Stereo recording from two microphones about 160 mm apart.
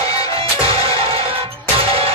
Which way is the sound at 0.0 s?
20° left (ahead or behind).